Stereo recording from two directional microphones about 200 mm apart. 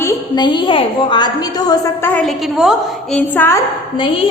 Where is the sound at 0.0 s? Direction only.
20° left (ahead or behind).